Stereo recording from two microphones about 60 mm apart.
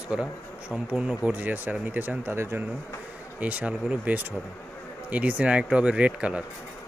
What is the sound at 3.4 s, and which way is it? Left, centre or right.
Speech, right.